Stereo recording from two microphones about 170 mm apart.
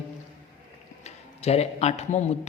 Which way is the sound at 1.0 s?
40° left (ahead or behind).